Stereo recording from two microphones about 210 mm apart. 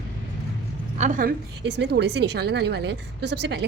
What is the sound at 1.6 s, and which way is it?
A woman's voice, 55° right (ahead or behind).